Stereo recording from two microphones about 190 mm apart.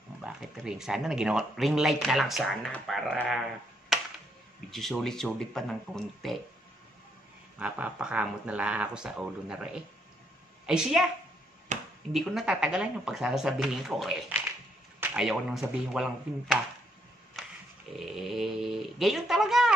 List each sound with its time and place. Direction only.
0.2 s speech: 5° right (ahead or behind)
3.9 s a sound: centre (ahead or behind)
4.6 s speech: centre (ahead or behind)
7.5 s speech: 5° right (ahead or behind)
11.7 s a sound: 40° right (ahead or behind)
12.1 s speech: centre (ahead or behind)
17.9 s speech: centre (ahead or behind)